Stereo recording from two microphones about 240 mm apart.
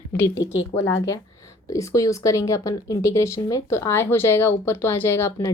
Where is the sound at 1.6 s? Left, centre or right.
Centre.